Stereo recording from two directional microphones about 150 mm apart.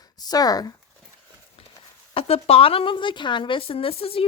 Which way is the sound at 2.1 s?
40° left (ahead or behind).